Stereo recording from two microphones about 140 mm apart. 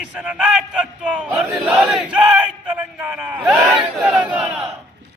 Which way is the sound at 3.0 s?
10° right (ahead or behind).